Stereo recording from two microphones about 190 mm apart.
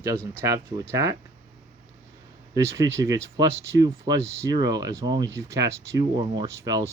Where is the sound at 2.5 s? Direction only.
15° right (ahead or behind).